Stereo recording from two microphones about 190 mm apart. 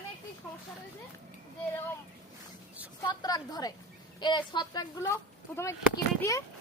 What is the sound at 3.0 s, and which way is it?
Speech, 20° left (ahead or behind).